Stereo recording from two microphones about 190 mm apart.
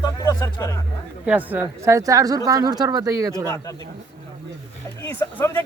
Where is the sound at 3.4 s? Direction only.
15° left (ahead or behind).